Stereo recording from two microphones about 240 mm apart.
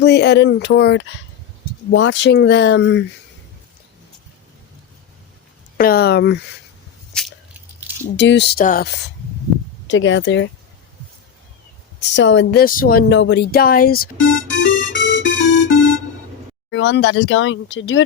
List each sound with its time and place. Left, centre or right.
0.0 s speech: left
5.7 s speech: left
8.1 s speech: left
9.8 s speech: left
12.1 s speech: left
14.5 s music: left
16.6 s speech: left